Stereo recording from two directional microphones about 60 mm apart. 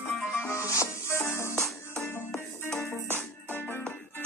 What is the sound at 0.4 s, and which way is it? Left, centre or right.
Music, left.